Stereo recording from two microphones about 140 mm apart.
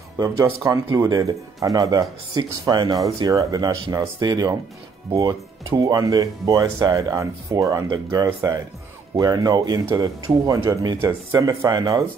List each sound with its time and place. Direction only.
0.2 s speech: 25° right (ahead or behind)